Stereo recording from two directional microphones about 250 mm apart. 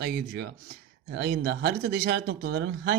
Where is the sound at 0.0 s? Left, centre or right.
Right.